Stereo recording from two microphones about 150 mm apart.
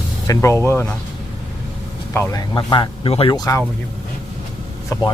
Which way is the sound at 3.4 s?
20° left (ahead or behind).